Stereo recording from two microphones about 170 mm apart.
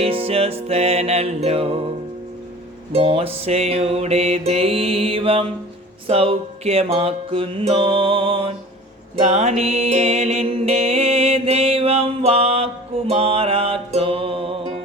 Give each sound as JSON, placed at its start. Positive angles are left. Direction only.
{"t": 0.0, "sound": "music", "side_deg": -35}
{"t": 2.9, "sound": "music", "side_deg": -35}